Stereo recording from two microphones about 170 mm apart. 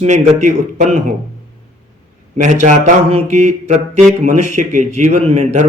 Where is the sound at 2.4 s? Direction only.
45° right (ahead or behind).